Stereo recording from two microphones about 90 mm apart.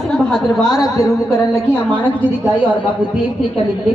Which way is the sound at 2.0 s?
20° left (ahead or behind).